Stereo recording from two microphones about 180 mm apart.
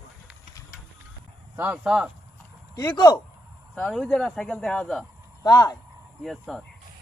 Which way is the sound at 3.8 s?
10° left (ahead or behind).